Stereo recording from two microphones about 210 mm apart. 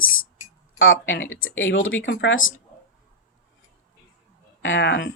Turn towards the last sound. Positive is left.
turn(degrees=60)  # may be behind; listen again after turning